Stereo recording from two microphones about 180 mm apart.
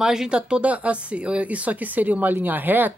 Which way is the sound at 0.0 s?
5° right (ahead or behind).